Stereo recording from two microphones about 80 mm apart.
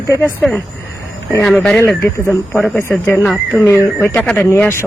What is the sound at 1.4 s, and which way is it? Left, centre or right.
Speech, centre.